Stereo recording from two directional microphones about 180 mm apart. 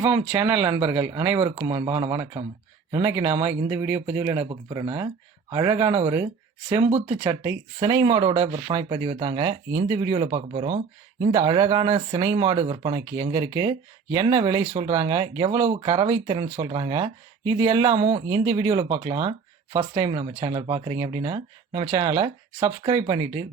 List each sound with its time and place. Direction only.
0.0 s speech: 15° right (ahead or behind)
8.1 s speech: 30° right (ahead or behind)